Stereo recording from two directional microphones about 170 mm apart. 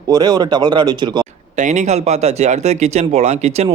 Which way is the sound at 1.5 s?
45° right (ahead or behind).